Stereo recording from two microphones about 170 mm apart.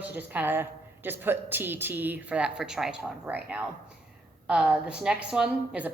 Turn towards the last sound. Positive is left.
turn(degrees=-5)  # may be behind; listen again after turning